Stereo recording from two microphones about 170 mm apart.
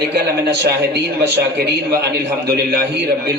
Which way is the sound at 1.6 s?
70° right (ahead or behind).